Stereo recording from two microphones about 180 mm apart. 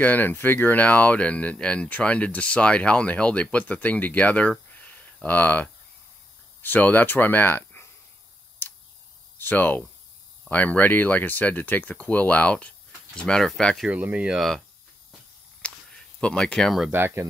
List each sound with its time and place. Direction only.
0.0 s speech: 10° left (ahead or behind)
8.6 s tick-tock: 10° left (ahead or behind)
9.4 s speech: 10° left (ahead or behind)
15.6 s a sound: 5° left (ahead or behind)
16.2 s speech: 5° left (ahead or behind)
16.9 s speech: 15° right (ahead or behind)